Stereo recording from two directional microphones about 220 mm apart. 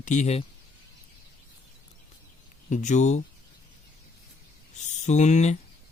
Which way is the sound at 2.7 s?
35° left (ahead or behind).